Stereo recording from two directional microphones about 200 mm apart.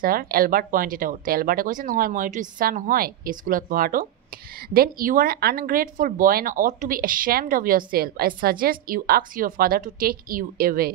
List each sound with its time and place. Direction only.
0.0 s speech: 45° right (ahead or behind)